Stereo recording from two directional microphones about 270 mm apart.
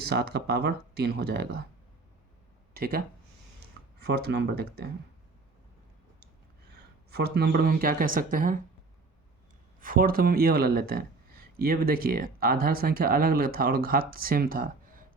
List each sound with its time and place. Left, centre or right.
0.0 s speech: right
2.7 s speech: right
4.0 s speech: right
6.7 s speech: right
9.8 s speech: right